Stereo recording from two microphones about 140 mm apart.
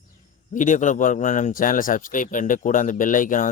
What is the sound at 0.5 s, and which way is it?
Speech, 65° left (ahead or behind).